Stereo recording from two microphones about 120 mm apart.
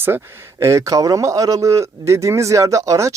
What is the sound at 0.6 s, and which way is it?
A man's voice, 25° right (ahead or behind).